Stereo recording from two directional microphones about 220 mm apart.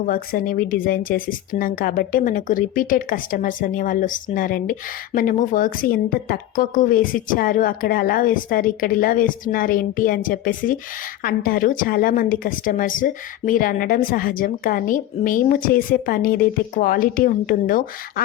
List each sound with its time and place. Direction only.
0.0 s speech: 40° left (ahead or behind)